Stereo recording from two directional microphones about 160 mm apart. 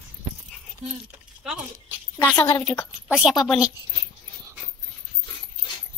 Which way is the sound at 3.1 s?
Centre (ahead or behind).